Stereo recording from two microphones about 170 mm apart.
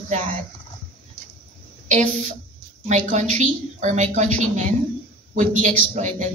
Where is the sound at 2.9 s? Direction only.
45° right (ahead or behind).